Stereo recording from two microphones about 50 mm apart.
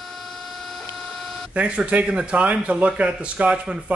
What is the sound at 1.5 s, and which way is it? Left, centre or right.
Speech, right.